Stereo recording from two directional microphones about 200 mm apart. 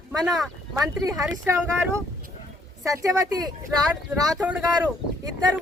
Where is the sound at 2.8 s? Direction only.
15° right (ahead or behind).